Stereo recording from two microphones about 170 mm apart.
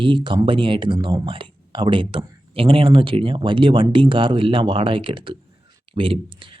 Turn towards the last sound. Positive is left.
turn(degrees=-30)  # may be behind; listen again after turning